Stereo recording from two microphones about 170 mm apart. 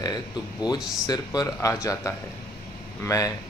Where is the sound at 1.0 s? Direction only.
20° left (ahead or behind).